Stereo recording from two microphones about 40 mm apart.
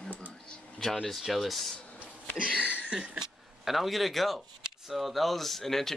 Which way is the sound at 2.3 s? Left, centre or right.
Right.